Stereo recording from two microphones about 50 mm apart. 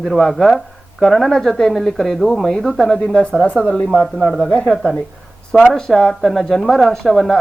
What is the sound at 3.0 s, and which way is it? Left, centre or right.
Speech, centre.